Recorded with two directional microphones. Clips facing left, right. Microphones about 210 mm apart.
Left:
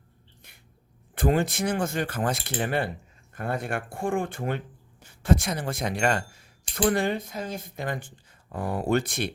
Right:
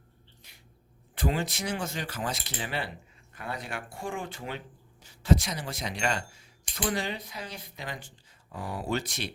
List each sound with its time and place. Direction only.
0.4 s cat: 55° left (ahead or behind)
1.1 s speech: 50° left (ahead or behind)